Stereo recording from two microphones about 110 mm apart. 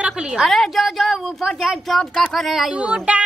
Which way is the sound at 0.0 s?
5° right (ahead or behind).